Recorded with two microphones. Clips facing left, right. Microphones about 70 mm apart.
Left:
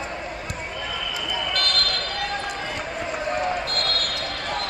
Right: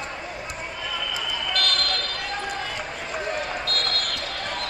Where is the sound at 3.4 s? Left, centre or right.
Left.